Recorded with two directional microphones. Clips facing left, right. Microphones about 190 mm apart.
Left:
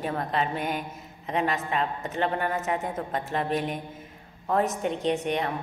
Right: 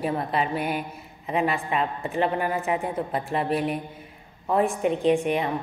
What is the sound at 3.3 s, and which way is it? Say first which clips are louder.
Mantra: right 3 dB; 5° right (ahead or behind).